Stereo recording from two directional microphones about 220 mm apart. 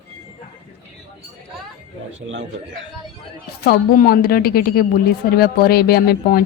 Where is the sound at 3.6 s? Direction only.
45° left (ahead or behind).